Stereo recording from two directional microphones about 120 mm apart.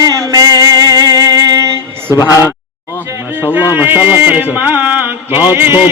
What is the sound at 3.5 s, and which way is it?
Speech, 15° right (ahead or behind).